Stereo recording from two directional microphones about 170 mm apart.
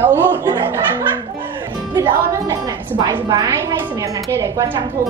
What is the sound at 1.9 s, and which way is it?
A woman's voice, 15° right (ahead or behind).